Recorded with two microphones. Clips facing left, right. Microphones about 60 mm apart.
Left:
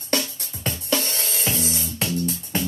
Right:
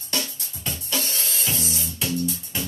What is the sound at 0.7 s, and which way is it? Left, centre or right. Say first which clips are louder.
Music: left 5 dB; left.